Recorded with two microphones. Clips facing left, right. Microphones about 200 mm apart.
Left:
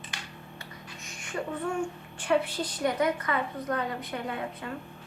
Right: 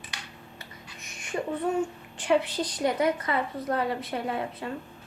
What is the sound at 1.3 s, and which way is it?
A woman's voice, 20° right (ahead or behind).